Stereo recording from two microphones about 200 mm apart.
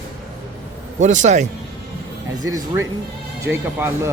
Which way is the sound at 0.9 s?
35° right (ahead or behind).